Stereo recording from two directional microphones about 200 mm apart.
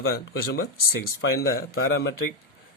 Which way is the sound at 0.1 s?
50° left (ahead or behind).